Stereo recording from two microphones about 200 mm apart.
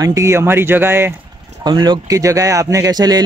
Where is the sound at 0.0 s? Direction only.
15° right (ahead or behind).